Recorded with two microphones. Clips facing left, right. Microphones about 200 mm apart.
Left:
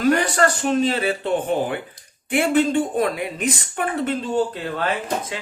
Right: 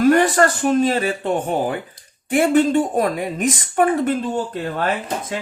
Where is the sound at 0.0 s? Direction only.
50° right (ahead or behind).